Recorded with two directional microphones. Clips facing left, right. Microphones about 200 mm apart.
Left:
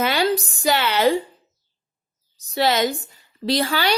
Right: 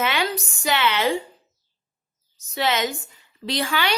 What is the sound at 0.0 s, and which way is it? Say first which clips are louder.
A woman's voice: left 4 dB; 35° left (ahead or behind).